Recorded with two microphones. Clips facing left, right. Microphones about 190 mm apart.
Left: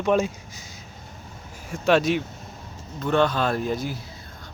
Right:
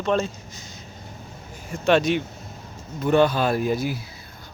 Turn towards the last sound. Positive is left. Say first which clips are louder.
# right 3 dB
turn(degrees=-10)  # may be behind; listen again after turning